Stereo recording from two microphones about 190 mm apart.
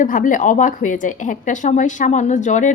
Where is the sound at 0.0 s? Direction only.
45° left (ahead or behind).